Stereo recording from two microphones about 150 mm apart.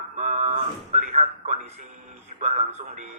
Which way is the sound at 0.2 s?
50° right (ahead or behind).